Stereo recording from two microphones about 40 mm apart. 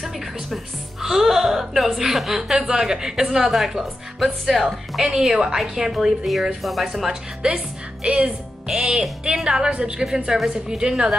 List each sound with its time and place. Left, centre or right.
0.0 s music: centre
1.0 s a woman's voice: centre
5.0 s a woman's voice: centre
7.4 s a woman's voice: right
9.9 s a woman's voice: centre